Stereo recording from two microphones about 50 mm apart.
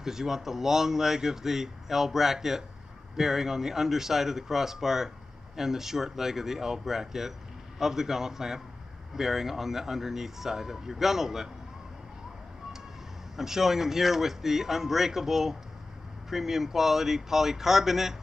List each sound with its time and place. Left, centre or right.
0.0 s speech: centre
13.4 s speech: centre